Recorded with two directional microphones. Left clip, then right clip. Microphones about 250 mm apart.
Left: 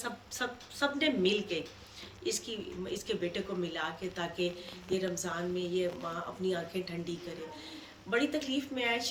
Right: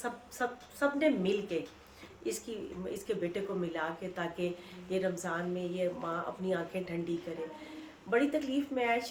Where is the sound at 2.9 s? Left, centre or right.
Centre.